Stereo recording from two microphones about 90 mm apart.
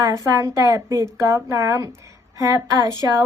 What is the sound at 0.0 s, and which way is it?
Speech, 35° right (ahead or behind).